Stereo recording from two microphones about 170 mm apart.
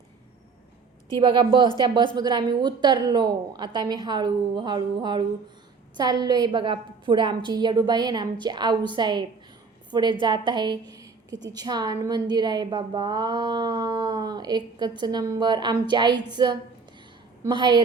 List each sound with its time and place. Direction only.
1.1 s a woman's voice: 25° right (ahead or behind)